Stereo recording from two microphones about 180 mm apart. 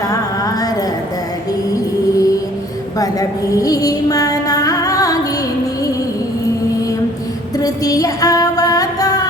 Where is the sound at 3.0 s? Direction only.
20° left (ahead or behind).